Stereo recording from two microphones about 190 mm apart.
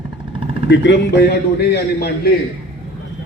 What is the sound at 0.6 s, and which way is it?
A man's voice, 65° left (ahead or behind).